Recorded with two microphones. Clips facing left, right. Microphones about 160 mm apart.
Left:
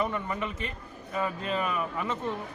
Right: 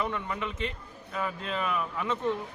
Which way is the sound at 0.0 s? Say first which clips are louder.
Left 2 dB; 5° left (ahead or behind).